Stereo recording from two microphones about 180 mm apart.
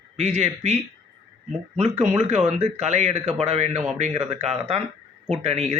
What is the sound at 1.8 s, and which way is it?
Speech, 35° right (ahead or behind).